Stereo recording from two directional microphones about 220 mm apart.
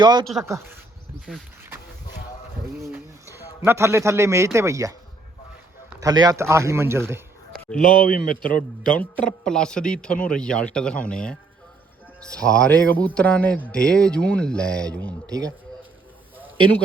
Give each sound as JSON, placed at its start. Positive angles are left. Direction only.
{"t": 0.0, "sound": "speech", "side_deg": -20}
{"t": 2.8, "sound": "a man's voice", "side_deg": -10}
{"t": 6.0, "sound": "speech", "side_deg": -15}
{"t": 7.8, "sound": "speech", "side_deg": 40}
{"t": 8.5, "sound": "a man's voice", "side_deg": 5}
{"t": 15.3, "sound": "speech", "side_deg": -15}